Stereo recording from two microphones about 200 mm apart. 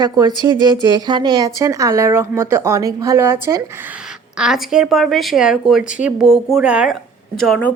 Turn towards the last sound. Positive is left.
turn(degrees=5)  # may be behind; listen again after turning